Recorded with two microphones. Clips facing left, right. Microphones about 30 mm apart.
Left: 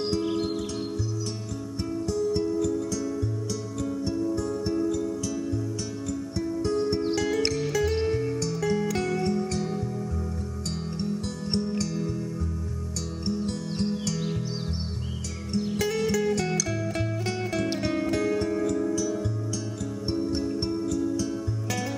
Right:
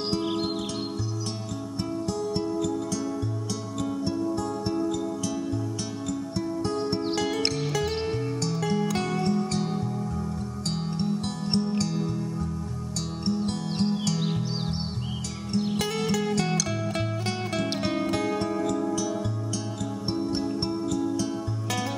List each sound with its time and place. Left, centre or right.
0.1 s music: right
2.0 s music: right
4.2 s music: right
6.6 s music: right
7.2 s music: centre
13.2 s music: right
15.8 s music: centre
20.1 s music: right